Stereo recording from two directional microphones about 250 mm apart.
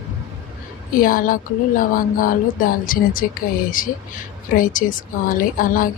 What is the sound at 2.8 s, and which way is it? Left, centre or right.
A woman's voice, left.